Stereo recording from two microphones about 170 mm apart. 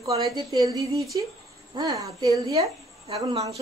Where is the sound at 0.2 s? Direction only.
20° right (ahead or behind).